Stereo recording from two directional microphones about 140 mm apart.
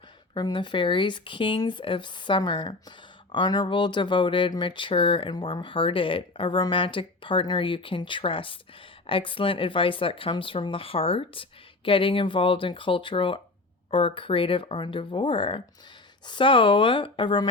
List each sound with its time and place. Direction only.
0.3 s speech: 35° left (ahead or behind)